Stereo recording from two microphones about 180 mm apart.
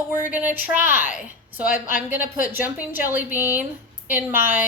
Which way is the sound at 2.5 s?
10° right (ahead or behind).